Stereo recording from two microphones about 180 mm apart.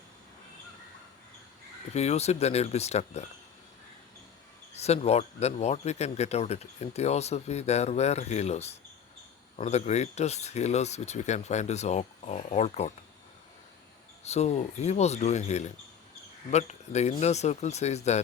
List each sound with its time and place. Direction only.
1.9 s a man's voice: 35° left (ahead or behind)
4.7 s a man's voice: 35° left (ahead or behind)
14.3 s a man's voice: 35° left (ahead or behind)